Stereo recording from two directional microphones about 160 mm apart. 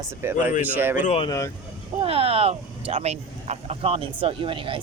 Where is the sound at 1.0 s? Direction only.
40° left (ahead or behind).